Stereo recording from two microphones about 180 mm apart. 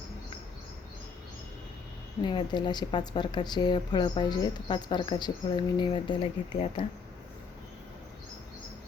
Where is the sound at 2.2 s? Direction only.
25° left (ahead or behind).